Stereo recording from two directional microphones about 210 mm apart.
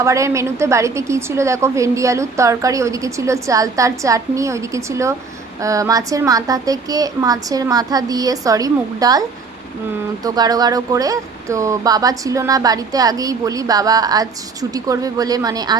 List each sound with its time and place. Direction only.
0.0 s speech: 15° right (ahead or behind)
10.2 s speech: 20° right (ahead or behind)